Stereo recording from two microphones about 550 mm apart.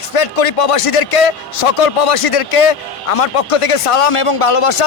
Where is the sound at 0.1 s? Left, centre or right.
Left.